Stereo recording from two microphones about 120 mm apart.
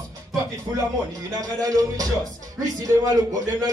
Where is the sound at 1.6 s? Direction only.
30° right (ahead or behind).